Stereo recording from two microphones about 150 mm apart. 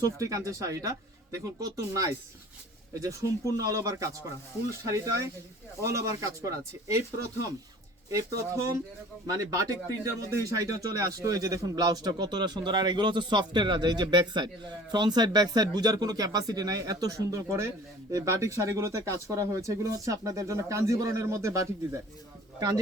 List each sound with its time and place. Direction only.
0.0 s speech: 20° right (ahead or behind)
5.8 s speech: 20° right (ahead or behind)
8.1 s speech: 20° right (ahead or behind)